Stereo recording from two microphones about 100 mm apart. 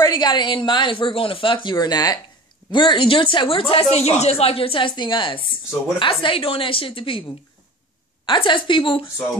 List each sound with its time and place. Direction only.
0.0 s speech: 45° left (ahead or behind)
2.7 s a woman's voice: 50° left (ahead or behind)
8.3 s a woman's voice: 55° left (ahead or behind)